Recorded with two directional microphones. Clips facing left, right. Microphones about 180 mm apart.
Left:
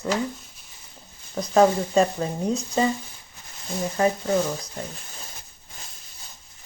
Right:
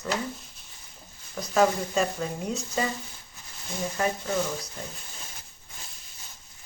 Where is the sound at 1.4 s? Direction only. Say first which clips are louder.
Left 5 dB; 35° left (ahead or behind).